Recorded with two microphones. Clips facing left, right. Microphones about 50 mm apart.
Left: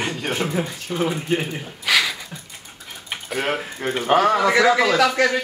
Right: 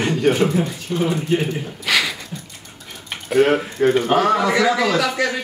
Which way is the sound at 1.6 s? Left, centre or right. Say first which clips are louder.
Even; centre.